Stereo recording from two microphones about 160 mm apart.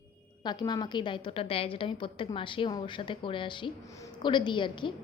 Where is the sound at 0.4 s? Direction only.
25° left (ahead or behind).